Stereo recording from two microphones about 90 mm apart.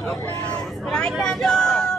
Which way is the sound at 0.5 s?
5° left (ahead or behind).